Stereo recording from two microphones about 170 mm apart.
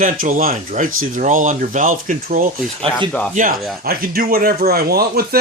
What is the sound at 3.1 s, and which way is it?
Speech, 5° left (ahead or behind).